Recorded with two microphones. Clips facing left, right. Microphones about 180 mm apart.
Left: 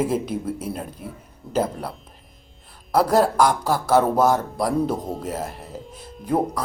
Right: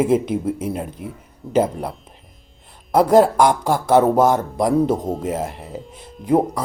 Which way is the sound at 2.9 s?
20° right (ahead or behind).